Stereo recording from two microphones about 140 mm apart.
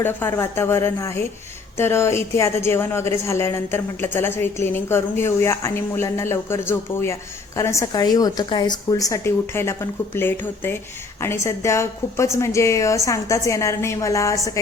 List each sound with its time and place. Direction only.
0.0 s a woman's voice: 15° left (ahead or behind)